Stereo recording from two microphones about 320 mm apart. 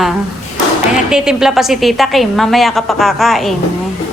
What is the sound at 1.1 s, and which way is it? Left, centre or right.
A woman's voice, centre.